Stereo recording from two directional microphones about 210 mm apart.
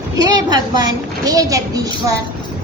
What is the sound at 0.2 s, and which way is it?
A woman's voice, 20° right (ahead or behind).